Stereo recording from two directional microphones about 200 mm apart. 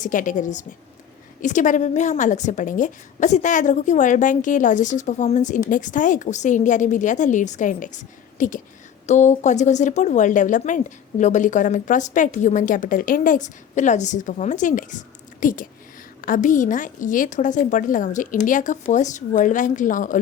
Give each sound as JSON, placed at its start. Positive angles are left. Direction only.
{"t": 0.0, "sound": "a woman's voice", "side_deg": 40}